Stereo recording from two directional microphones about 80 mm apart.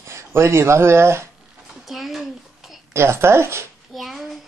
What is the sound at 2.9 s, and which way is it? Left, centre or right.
Speech, right.